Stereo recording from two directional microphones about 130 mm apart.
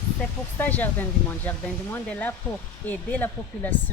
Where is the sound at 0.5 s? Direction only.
15° left (ahead or behind).